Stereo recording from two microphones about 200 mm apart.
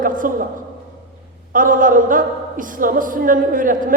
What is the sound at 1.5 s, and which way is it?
Speech, 40° right (ahead or behind).